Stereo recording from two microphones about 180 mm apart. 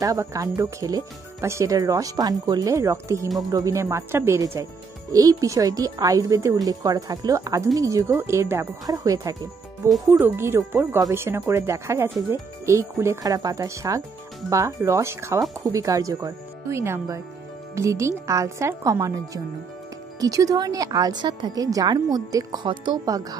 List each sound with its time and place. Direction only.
0.0 s speech: 20° right (ahead or behind)